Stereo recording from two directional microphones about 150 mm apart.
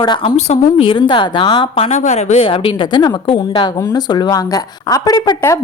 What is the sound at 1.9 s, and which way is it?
A woman's voice, 50° left (ahead or behind).